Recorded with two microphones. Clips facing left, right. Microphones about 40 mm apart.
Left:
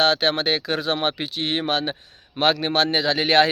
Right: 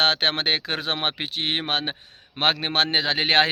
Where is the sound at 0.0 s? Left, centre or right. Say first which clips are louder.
Left 2 dB; right.